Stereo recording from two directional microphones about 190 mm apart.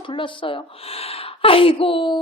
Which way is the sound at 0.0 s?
25° left (ahead or behind).